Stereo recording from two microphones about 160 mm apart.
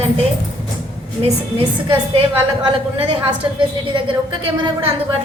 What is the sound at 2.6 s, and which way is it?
A woman's voice, 35° right (ahead or behind).